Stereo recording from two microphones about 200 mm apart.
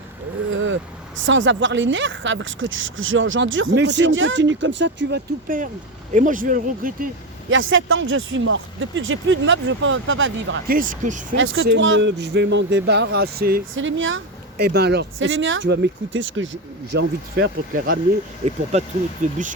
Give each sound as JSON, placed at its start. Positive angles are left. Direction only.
{"t": 0.5, "sound": "vehicle", "side_deg": -75}
{"t": 1.2, "sound": "speech", "side_deg": -70}
{"t": 6.1, "sound": "speech", "side_deg": -40}
{"t": 7.5, "sound": "speech", "side_deg": -75}
{"t": 10.7, "sound": "speech", "side_deg": -45}
{"t": 11.3, "sound": "speech", "side_deg": -75}
{"t": 13.7, "sound": "speech", "side_deg": -70}
{"t": 14.6, "sound": "speech", "side_deg": -55}
{"t": 18.4, "sound": "speech", "side_deg": -35}